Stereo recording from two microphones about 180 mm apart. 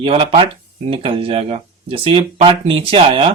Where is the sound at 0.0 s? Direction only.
35° right (ahead or behind).